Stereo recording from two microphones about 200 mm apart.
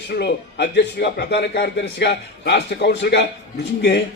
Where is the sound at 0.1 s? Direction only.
55° left (ahead or behind).